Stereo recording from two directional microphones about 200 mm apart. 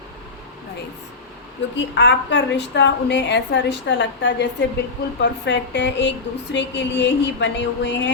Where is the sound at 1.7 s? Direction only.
60° left (ahead or behind).